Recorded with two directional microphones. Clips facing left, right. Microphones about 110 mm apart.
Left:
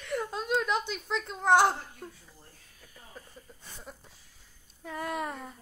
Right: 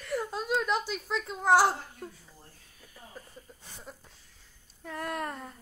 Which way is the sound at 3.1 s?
5° right (ahead or behind).